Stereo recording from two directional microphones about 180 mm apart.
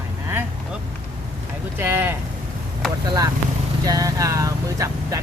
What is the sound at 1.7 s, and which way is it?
Speech, 10° right (ahead or behind).